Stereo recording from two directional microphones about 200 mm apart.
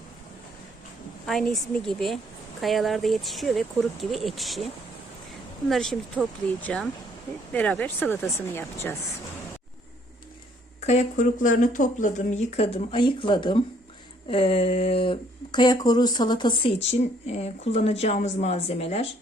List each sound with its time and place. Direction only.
1.3 s speech: centre (ahead or behind)
10.8 s speech: 35° left (ahead or behind)